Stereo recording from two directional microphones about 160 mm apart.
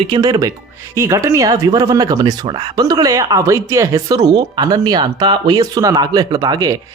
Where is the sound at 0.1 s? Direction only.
25° right (ahead or behind).